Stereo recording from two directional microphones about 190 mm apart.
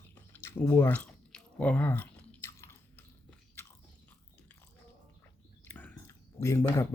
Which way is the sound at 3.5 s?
10° left (ahead or behind).